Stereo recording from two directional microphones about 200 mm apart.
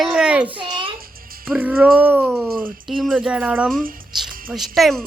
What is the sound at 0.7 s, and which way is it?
Music, 25° right (ahead or behind).